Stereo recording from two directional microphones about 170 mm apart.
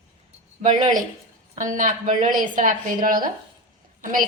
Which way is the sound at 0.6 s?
50° right (ahead or behind).